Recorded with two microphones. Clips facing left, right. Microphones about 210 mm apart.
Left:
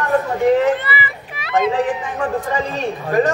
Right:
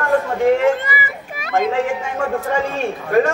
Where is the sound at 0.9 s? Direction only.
45° right (ahead or behind).